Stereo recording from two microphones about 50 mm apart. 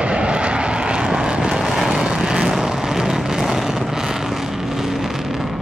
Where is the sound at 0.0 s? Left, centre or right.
Centre.